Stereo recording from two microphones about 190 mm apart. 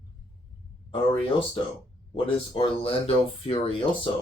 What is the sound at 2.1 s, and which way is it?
Speech, 30° left (ahead or behind).